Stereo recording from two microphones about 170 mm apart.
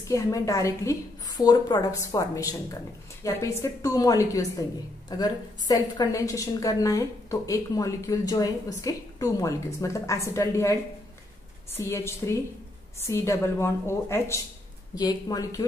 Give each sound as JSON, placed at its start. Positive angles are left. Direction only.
{"t": 0.1, "sound": "a woman's voice", "side_deg": 20}